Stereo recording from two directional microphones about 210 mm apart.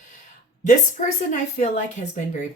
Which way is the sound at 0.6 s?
35° left (ahead or behind).